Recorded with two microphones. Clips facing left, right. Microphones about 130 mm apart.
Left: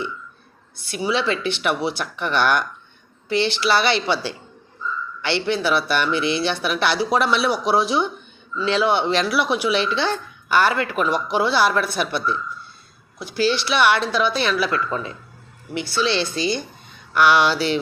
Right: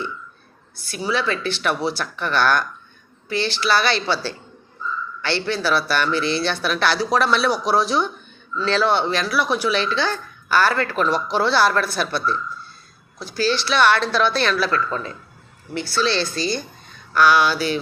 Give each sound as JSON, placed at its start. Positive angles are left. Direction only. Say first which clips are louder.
{"t": 0.9, "sound": "speech", "louder": "left 1 dB", "side_deg": 20}